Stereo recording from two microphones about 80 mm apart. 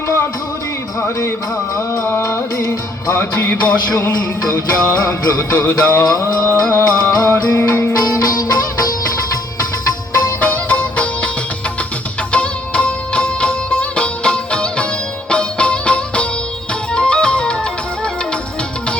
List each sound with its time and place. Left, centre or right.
1.7 s music: left
4.5 s music: left
5.5 s music: left
6.1 s music: left
10.4 s music: centre
12.3 s music: centre